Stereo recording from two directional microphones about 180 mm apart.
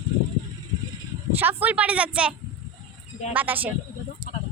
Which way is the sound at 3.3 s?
10° right (ahead or behind).